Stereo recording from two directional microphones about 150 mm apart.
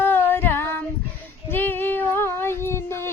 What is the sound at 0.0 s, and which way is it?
Female singing, 15° left (ahead or behind).